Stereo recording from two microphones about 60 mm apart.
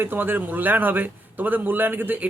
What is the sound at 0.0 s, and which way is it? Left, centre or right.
A man's voice, right.